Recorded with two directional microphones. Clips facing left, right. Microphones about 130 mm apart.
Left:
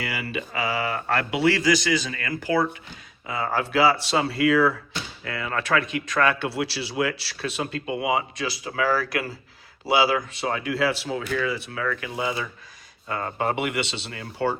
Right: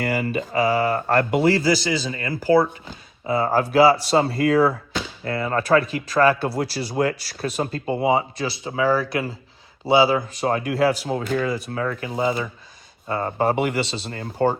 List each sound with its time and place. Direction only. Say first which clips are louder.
0.0 s speech: right 7 dB; 45° right (ahead or behind); by 10.2 s 25° right (ahead or behind)
10.3 s speech: right 4 dB; 40° right (ahead or behind)